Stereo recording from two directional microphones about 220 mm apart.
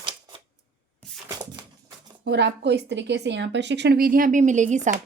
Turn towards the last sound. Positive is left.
turn(degrees=-35)  # may be behind; listen again after turning